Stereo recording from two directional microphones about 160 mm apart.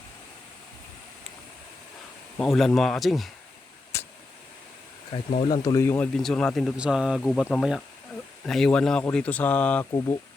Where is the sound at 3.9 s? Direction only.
15° left (ahead or behind).